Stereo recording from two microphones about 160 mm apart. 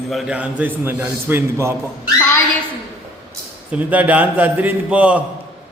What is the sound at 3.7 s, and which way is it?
A man's voice, 10° right (ahead or behind).